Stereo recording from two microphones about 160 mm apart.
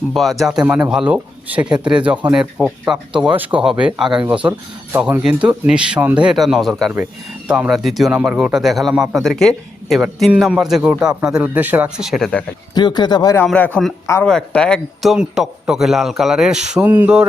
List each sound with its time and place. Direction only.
0.1 s a man's voice: centre (ahead or behind)
12.7 s speech: 25° left (ahead or behind)
13.4 s a man's voice: 10° left (ahead or behind); by 17.2 s 10° right (ahead or behind)